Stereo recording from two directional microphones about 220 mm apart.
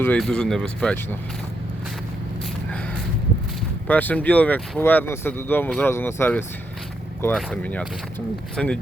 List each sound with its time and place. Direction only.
0.0 s speech: 5° left (ahead or behind)
3.8 s speech: 5° left (ahead or behind)